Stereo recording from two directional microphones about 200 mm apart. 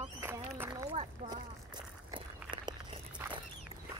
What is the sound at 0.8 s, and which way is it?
Speech, 30° right (ahead or behind).